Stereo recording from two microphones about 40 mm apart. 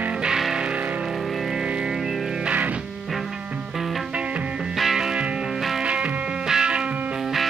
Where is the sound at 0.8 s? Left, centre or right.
Right.